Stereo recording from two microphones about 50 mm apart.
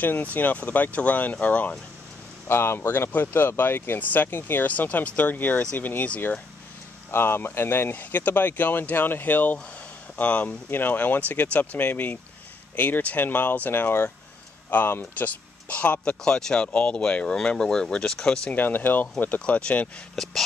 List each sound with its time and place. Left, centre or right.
0.0 s speech: left
2.4 s speech: left
4.0 s speech: left
4.3 s speech: left
4.6 s speech: left
7.1 s speech: left
7.9 s speech: left
15.1 s speech: left
16.1 s speech: centre
18.5 s speech: left
20.2 s speech: centre